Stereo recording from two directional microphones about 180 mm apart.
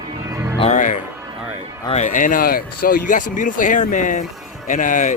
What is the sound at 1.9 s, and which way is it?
A man's voice, 40° left (ahead or behind).